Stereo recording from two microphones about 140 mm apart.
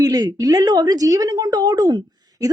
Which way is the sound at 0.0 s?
25° right (ahead or behind).